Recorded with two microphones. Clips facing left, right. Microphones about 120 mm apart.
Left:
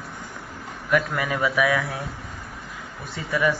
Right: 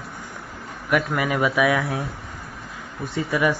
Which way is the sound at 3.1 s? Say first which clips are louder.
Right 2 dB; 15° right (ahead or behind).